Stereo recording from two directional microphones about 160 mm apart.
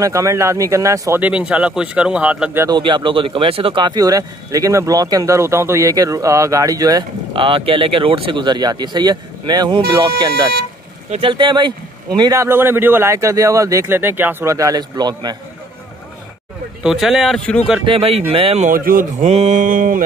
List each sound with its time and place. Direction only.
0.0 s speech: 20° right (ahead or behind)
2.7 s speech: 30° right (ahead or behind)
16.8 s speech: centre (ahead or behind)
17.8 s speech: 35° right (ahead or behind)
18.7 s speech: 60° right (ahead or behind)
19.2 s mantra: 45° right (ahead or behind)